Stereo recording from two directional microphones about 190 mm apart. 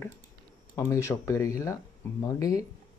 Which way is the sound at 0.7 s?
15° left (ahead or behind).